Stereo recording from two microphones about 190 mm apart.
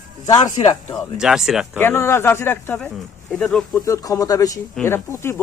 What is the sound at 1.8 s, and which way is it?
Speech, 10° left (ahead or behind).